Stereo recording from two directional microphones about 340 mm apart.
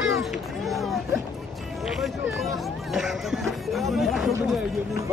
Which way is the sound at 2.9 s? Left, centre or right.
Centre.